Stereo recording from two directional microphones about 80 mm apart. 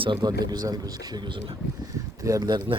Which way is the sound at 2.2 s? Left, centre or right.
Right.